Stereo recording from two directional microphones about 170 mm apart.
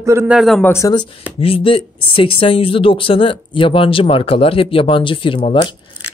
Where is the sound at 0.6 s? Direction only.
15° left (ahead or behind).